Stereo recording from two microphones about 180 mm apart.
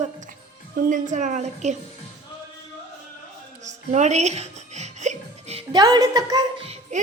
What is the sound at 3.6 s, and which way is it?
Music, 40° right (ahead or behind).